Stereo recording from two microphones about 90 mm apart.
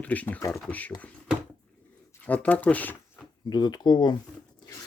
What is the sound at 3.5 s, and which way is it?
Speech, 50° left (ahead or behind).